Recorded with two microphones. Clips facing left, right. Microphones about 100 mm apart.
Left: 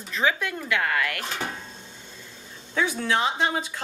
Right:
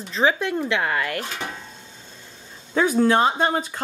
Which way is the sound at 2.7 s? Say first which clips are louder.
Right 7 dB; 40° right (ahead or behind).